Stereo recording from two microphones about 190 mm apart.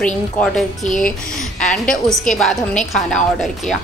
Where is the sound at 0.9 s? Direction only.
45° left (ahead or behind).